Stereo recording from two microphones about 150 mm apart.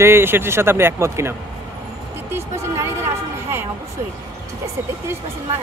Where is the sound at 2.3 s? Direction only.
15° right (ahead or behind).